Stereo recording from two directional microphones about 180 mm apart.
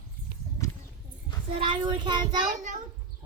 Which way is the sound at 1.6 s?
25° right (ahead or behind).